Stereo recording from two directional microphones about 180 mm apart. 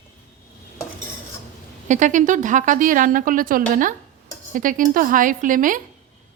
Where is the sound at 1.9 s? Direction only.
45° right (ahead or behind).